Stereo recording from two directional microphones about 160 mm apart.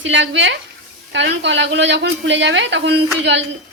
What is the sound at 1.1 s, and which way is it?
A woman's voice, 90° right.